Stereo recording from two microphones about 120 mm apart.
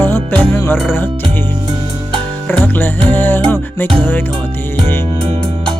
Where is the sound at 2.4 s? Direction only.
15° left (ahead or behind).